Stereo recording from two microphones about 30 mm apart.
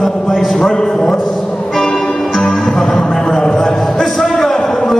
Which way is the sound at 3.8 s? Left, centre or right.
Centre.